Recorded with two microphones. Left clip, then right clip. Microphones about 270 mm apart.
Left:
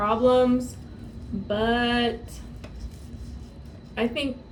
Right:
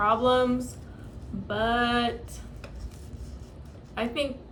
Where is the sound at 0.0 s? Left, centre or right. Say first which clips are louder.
Left 1 dB; right.